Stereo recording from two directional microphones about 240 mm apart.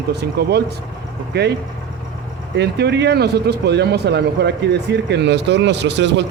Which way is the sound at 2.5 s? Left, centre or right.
Right.